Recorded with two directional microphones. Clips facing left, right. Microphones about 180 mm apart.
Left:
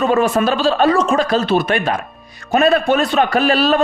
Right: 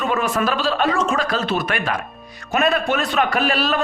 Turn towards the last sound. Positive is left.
turn(degrees=30)  # may be behind; listen again after turning